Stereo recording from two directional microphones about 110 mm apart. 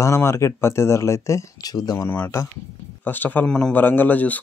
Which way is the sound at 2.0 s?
20° left (ahead or behind).